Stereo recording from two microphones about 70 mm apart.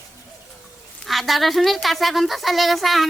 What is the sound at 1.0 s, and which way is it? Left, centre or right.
Speech, centre.